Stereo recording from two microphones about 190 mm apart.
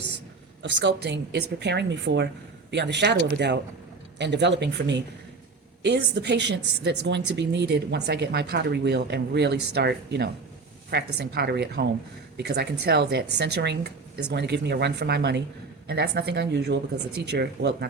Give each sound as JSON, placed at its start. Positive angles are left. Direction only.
{"t": 0.6, "sound": "a woman's voice", "side_deg": -70}